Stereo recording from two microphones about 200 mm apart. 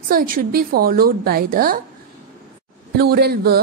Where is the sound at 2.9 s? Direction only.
50° right (ahead or behind).